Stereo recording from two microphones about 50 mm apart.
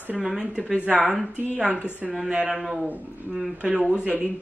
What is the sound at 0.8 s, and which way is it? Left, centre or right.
Speech, right.